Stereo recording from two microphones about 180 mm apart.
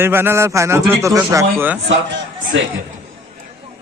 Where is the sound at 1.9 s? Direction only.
85° right.